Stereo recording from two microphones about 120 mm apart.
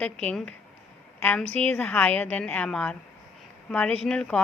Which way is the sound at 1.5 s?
65° right (ahead or behind).